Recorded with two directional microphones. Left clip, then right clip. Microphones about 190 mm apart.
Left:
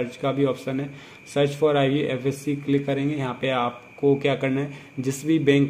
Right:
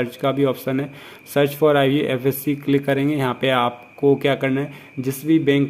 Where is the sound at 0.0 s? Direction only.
15° right (ahead or behind).